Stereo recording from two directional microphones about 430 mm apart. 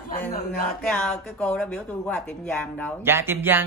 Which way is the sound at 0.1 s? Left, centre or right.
Centre.